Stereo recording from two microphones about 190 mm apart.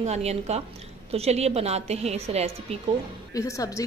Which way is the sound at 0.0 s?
35° right (ahead or behind).